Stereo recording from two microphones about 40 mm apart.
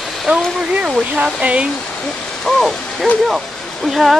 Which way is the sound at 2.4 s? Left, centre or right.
Centre.